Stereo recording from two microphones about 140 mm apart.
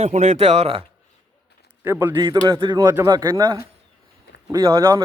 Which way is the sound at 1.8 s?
15° right (ahead or behind).